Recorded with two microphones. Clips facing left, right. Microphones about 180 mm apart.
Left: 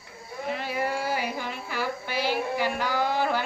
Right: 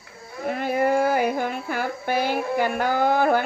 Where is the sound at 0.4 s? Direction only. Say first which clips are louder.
Right 7 dB; 50° right (ahead or behind).